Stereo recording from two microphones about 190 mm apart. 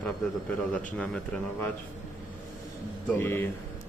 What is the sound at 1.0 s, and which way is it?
Speech, 5° left (ahead or behind).